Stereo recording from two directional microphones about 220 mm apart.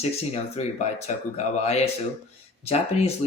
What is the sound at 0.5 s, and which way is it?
Speech, 30° left (ahead or behind).